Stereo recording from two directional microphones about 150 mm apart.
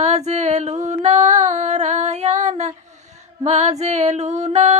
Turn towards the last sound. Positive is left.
turn(degrees=-50)  # may be behind; listen again after turning